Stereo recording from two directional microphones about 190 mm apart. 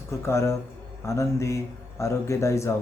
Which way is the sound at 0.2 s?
15° left (ahead or behind).